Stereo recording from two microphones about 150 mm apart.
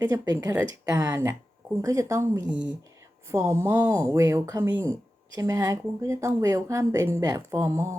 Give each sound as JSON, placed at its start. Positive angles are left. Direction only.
{"t": 0.0, "sound": "speech", "side_deg": -20}